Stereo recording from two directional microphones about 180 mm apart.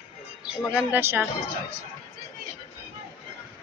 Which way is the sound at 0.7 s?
10° right (ahead or behind).